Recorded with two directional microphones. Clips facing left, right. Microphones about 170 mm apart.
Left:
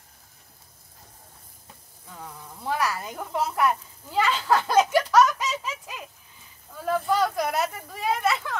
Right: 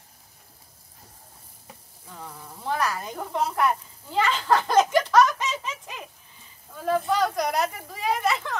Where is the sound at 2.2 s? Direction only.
10° left (ahead or behind).